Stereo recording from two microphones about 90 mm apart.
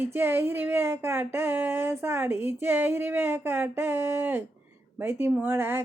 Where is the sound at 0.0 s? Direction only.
25° right (ahead or behind).